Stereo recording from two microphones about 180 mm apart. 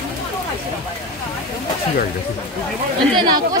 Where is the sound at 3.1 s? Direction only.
25° right (ahead or behind).